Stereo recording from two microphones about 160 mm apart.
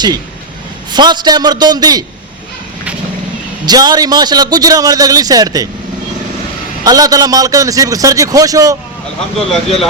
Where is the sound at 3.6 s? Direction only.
25° right (ahead or behind).